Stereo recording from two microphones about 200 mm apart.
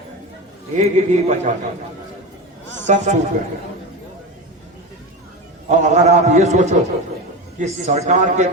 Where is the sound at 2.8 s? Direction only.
35° right (ahead or behind).